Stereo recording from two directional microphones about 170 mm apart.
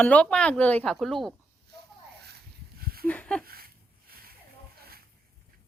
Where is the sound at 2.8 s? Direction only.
60° right (ahead or behind).